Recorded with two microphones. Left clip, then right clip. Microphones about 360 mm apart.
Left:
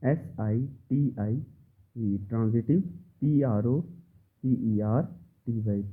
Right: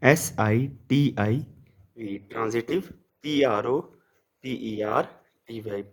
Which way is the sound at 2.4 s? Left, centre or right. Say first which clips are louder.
Right 4 dB; centre.